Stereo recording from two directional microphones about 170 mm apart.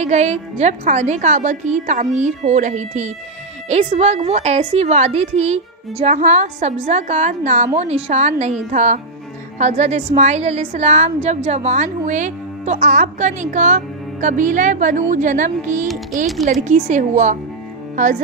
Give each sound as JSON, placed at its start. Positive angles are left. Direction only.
{"t": 0.0, "sound": "a woman's voice", "side_deg": -40}